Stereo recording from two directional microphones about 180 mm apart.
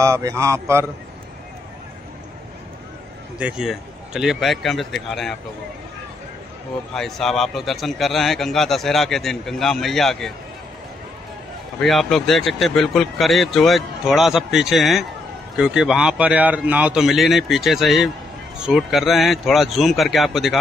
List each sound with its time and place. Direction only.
0.0 s a man's voice: 15° right (ahead or behind)
3.3 s a man's voice: 5° right (ahead or behind)
6.9 s a man's voice: centre (ahead or behind)
11.8 s a man's voice: centre (ahead or behind)